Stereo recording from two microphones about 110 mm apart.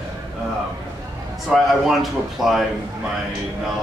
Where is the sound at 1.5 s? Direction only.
Centre (ahead or behind).